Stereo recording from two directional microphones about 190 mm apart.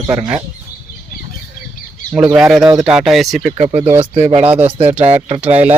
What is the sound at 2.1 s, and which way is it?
Speech, 5° right (ahead or behind).